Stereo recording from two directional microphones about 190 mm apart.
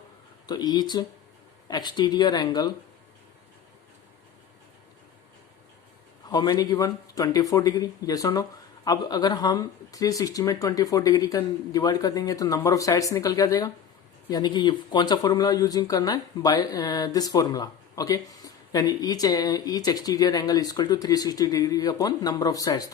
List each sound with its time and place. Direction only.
0.4 s speech: 20° left (ahead or behind)
6.2 s speech: 20° left (ahead or behind)